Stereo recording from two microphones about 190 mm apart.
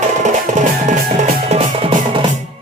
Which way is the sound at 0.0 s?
40° right (ahead or behind).